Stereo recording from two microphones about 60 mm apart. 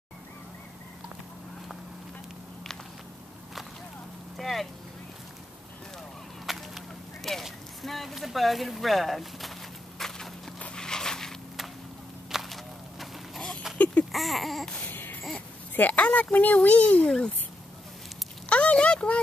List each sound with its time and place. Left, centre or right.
4.4 s speech: centre
6.4 s fowl: centre
7.4 s speech: centre
9.9 s horse: centre
10.6 s a sound: centre
12.3 s walk: centre
14.1 s speech: centre
14.8 s baby cry: left
15.7 s a sound: left
16.5 s a child's voice: left
17.0 s speech: centre
18.5 s a sound: centre